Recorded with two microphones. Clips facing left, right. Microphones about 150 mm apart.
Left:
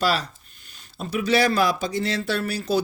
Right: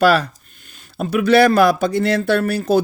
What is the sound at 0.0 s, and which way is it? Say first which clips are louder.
A man's voice: right 9 dB; 60° right (ahead or behind).